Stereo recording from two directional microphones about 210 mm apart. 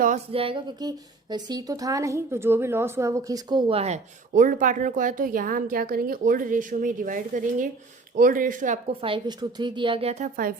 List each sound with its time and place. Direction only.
0.3 s a woman's voice: 25° right (ahead or behind)